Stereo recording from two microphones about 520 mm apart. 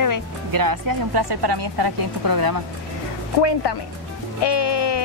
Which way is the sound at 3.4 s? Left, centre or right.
Left.